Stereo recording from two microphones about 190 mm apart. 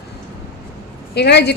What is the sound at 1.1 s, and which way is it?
Speech, 60° left (ahead or behind).